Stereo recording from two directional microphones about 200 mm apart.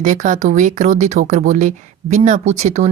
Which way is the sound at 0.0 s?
40° right (ahead or behind).